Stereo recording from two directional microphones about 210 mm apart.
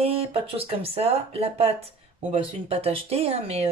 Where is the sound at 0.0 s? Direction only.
25° right (ahead or behind).